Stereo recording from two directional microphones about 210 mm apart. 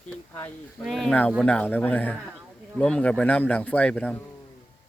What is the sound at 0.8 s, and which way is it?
Speech, centre (ahead or behind).